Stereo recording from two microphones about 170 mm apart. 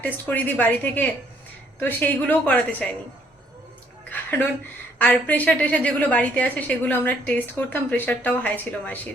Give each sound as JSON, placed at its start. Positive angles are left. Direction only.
{"t": 0.0, "sound": "a woman's voice", "side_deg": 10}
{"t": 4.1, "sound": "a sound", "side_deg": 10}
{"t": 4.9, "sound": "a woman's voice", "side_deg": 10}